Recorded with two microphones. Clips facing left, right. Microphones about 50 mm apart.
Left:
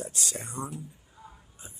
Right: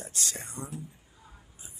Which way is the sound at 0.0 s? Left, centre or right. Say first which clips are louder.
Left 2 dB; centre.